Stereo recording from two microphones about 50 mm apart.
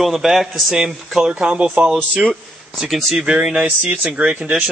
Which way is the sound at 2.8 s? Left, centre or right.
Centre.